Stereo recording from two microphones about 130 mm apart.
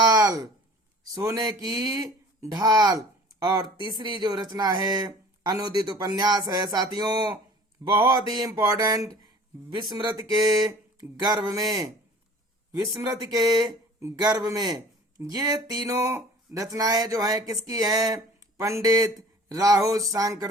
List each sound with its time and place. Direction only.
0.0 s a sound: 30° right (ahead or behind)
1.1 s speech: 25° right (ahead or behind)
12.9 s speech: 30° right (ahead or behind)